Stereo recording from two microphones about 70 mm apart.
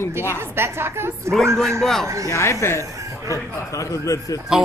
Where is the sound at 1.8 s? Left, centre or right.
Centre.